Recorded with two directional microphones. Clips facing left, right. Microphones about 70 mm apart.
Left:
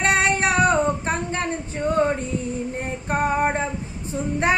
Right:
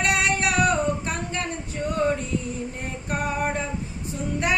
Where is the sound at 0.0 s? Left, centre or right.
Left.